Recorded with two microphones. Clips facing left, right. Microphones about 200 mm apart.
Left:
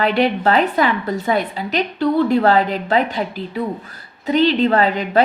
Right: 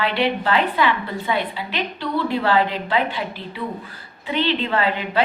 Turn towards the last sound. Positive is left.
turn(degrees=40)  # may be behind; listen again after turning